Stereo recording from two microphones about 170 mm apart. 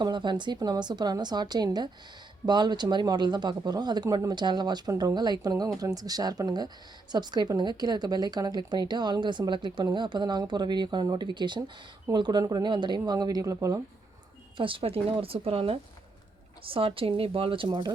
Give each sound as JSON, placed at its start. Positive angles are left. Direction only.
{"t": 0.0, "sound": "speech", "side_deg": -25}
{"t": 14.5, "sound": "speech", "side_deg": -30}